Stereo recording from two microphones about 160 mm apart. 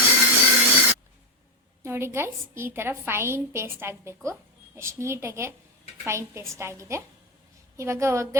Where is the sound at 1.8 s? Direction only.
15° right (ahead or behind).